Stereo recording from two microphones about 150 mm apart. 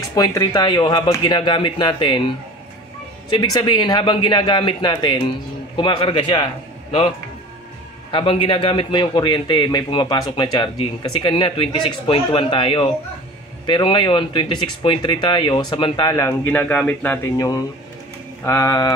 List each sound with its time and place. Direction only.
0.1 s speech: 20° left (ahead or behind)
3.3 s speech: 30° left (ahead or behind)
8.1 s speech: 35° left (ahead or behind); by 16.3 s 20° left (ahead or behind)
16.4 s a man's voice: 10° left (ahead or behind)
18.4 s speech: 15° left (ahead or behind)